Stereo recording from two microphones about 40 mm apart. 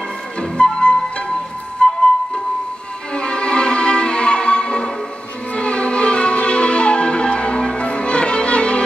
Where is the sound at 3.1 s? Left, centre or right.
Left.